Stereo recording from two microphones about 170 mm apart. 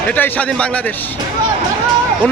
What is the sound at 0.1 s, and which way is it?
Speech, 10° left (ahead or behind).